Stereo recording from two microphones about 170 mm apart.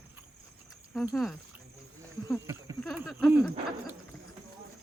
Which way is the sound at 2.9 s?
5° right (ahead or behind).